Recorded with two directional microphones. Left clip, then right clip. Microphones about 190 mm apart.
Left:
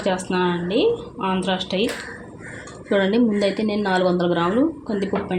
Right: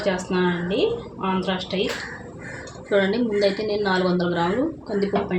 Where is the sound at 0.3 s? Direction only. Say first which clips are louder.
Left 1 dB; 35° left (ahead or behind).